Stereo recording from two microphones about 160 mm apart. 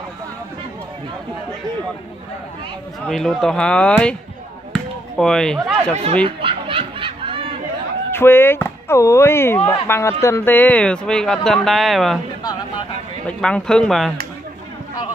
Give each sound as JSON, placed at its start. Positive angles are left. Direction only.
{"t": 3.1, "sound": "speech", "side_deg": 5}
{"t": 6.2, "sound": "snicker", "side_deg": -35}
{"t": 8.1, "sound": "speech", "side_deg": 15}
{"t": 13.3, "sound": "speech", "side_deg": 5}